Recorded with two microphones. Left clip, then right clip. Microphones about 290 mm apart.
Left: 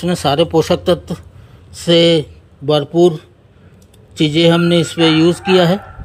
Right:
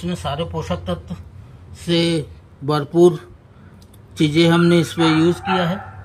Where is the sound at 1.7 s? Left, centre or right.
Centre.